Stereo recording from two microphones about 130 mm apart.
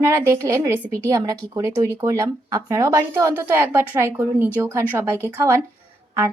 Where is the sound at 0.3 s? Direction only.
20° right (ahead or behind).